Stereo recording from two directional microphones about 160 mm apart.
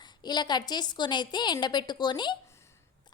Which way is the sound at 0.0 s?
25° left (ahead or behind).